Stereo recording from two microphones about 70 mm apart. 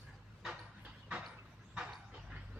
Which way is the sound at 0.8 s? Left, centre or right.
Centre.